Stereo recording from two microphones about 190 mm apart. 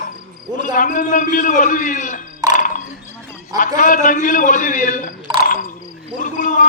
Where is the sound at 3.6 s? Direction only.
45° left (ahead or behind).